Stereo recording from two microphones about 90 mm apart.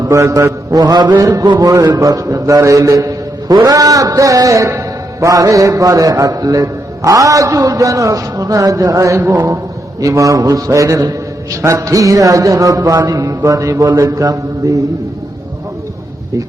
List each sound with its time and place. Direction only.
0.0 s mantra: 35° right (ahead or behind)
1.2 s a man's voice: 40° right (ahead or behind)